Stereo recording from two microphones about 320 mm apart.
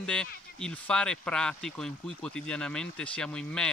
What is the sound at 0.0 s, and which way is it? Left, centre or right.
Speech, centre.